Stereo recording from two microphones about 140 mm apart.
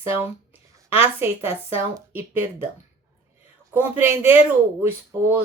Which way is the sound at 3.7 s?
15° right (ahead or behind).